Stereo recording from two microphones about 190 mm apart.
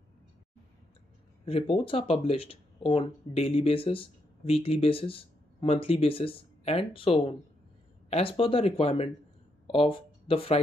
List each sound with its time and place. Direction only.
1.4 s speech: 30° left (ahead or behind)